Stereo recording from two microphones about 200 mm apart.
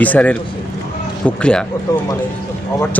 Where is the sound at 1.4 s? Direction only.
5° left (ahead or behind).